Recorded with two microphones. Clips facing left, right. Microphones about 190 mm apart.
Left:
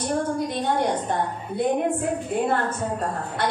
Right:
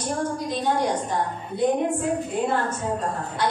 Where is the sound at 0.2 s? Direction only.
55° left (ahead or behind).